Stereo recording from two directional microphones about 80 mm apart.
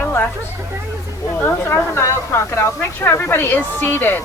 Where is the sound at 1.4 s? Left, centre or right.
Left.